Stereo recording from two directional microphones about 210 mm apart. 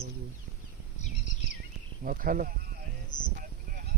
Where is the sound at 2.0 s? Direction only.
40° right (ahead or behind).